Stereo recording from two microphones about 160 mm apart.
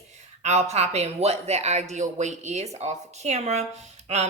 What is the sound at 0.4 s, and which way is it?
Speech, 45° right (ahead or behind).